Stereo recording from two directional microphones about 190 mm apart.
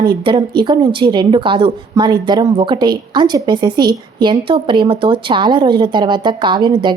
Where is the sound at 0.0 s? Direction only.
25° right (ahead or behind).